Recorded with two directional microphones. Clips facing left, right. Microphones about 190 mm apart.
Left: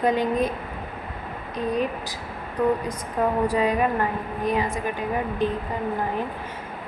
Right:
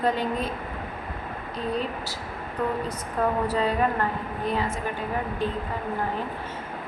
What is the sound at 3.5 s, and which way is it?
A woman's voice, 10° left (ahead or behind).